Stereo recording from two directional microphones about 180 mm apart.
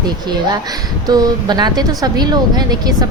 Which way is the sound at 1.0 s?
20° right (ahead or behind).